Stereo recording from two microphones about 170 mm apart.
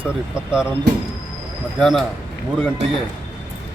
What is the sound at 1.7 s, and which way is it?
Speech, centre (ahead or behind).